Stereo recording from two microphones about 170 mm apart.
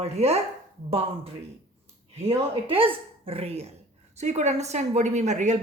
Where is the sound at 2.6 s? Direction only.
30° right (ahead or behind).